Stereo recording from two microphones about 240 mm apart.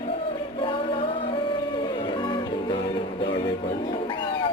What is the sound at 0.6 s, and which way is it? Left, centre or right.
Music, left.